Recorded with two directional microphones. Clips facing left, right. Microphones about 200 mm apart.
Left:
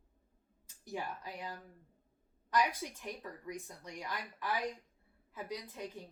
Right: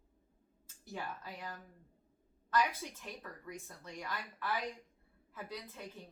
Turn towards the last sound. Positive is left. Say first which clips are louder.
# left 3 dB
turn(degrees=15)  # may be behind; listen again after turning